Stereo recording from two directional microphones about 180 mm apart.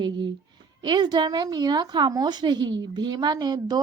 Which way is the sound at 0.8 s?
25° right (ahead or behind).